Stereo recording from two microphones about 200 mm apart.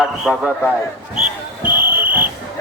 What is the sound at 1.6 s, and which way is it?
Basketball bounce, 10° right (ahead or behind).